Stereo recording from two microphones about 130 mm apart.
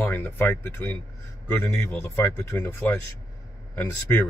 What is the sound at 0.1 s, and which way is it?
Speech, 15° left (ahead or behind).